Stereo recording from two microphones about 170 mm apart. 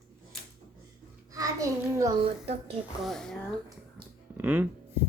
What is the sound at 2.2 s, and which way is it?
Speech, 35° right (ahead or behind).